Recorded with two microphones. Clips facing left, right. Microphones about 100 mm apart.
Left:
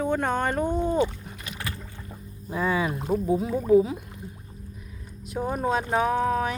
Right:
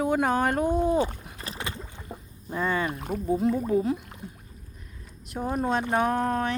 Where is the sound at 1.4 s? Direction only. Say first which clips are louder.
Right 1 dB; 25° right (ahead or behind).